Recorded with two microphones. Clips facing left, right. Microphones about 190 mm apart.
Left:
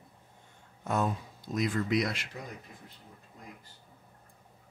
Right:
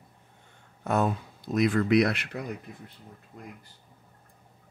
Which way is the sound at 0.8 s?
65° right (ahead or behind).